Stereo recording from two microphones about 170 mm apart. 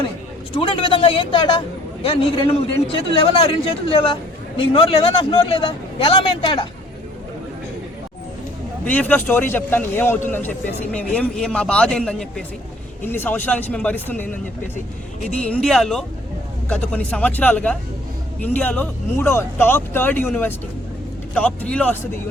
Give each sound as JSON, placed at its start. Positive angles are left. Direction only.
{"t": 0.6, "sound": "a man's voice", "side_deg": 30}
{"t": 8.8, "sound": "a man's voice", "side_deg": 10}
{"t": 15.4, "sound": "a man's voice", "side_deg": 5}